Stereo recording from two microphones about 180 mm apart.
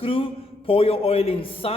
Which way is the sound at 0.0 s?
30° left (ahead or behind).